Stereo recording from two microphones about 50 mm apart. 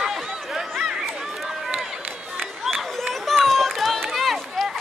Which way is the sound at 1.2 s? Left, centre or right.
Centre.